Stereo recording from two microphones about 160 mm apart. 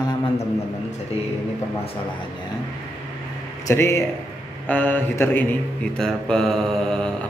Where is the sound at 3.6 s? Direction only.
15° left (ahead or behind).